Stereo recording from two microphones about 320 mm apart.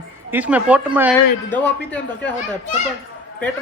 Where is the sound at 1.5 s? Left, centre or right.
Centre.